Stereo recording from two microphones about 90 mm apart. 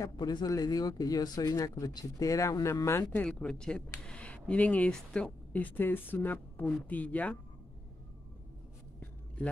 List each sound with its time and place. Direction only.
0.0 s speech: 50° left (ahead or behind)
1.5 s speech: 35° left (ahead or behind)
3.1 s speech: 15° left (ahead or behind)